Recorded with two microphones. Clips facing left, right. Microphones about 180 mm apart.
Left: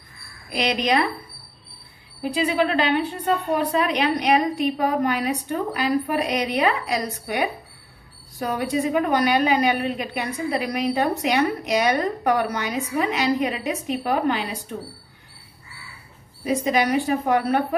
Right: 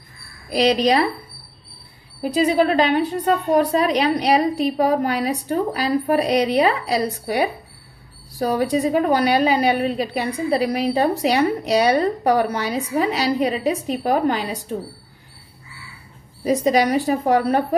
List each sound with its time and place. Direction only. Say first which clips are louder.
0.5 s a woman's voice: right 6 dB; 35° right (ahead or behind)
2.2 s a woman's voice: right 4 dB; 40° right (ahead or behind)
16.4 s a woman's voice: right 4 dB; 35° right (ahead or behind)